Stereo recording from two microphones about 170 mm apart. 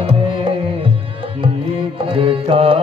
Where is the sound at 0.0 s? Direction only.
30° right (ahead or behind).